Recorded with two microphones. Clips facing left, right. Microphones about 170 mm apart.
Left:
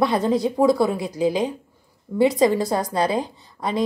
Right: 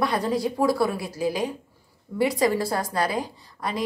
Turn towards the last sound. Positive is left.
turn(degrees=25)  # may be behind; listen again after turning